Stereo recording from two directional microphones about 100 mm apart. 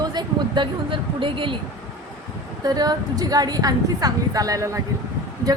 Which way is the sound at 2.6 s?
40° right (ahead or behind).